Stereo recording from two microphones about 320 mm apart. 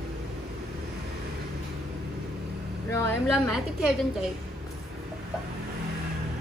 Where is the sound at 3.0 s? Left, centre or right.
Centre.